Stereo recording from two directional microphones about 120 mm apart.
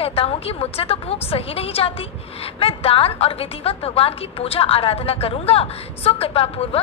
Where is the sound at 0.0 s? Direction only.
50° left (ahead or behind).